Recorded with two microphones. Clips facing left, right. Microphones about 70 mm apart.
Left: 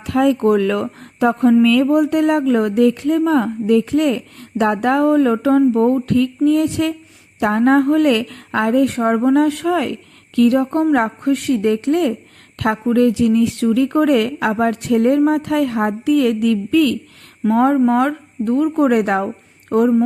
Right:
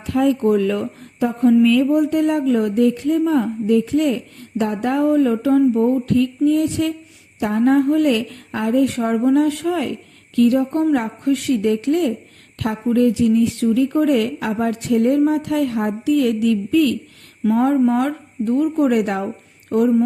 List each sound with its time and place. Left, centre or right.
0.0 s speech: left
0.3 s speech: left
5.7 s speech: left
12.8 s speech: left
17.5 s speech: left